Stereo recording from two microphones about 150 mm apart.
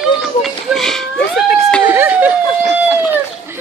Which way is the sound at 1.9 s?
15° right (ahead or behind).